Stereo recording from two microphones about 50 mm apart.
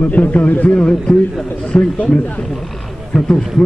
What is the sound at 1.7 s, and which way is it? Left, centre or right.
A man's voice, left.